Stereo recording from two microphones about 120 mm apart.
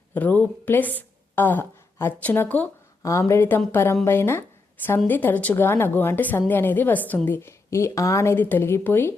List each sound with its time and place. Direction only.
0.1 s a woman's voice: 15° left (ahead or behind)